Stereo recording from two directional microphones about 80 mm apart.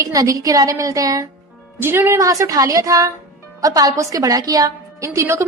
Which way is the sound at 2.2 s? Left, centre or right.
Right.